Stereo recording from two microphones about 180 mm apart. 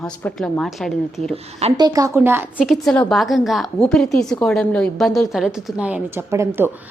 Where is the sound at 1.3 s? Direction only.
35° right (ahead or behind).